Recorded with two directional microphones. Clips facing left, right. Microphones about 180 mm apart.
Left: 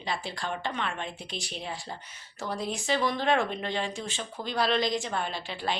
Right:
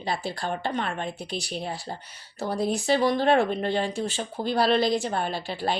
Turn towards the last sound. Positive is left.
turn(degrees=-40)  # may be behind; listen again after turning